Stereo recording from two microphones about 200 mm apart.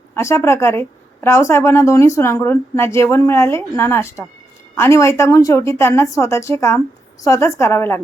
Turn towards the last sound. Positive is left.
turn(degrees=10)  # may be behind; listen again after turning